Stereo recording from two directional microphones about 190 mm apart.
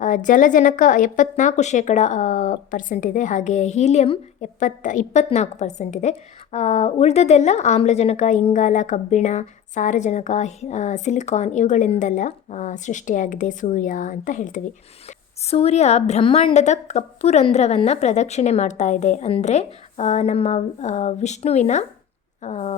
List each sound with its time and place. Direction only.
0.0 s a woman's voice: 40° left (ahead or behind)